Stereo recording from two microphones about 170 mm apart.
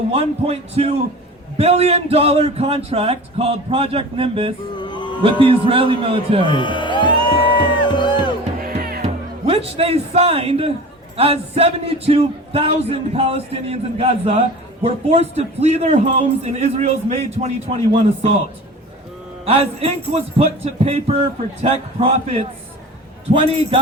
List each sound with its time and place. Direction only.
0.1 s speech: 35° right (ahead or behind)
4.8 s music: 25° left (ahead or behind)
5.2 s speech: 30° right (ahead or behind)
6.4 s music: 30° left (ahead or behind)
8.6 s music: 60° right (ahead or behind)
9.5 s speech: 35° right (ahead or behind)
19.5 s speech: 35° right (ahead or behind)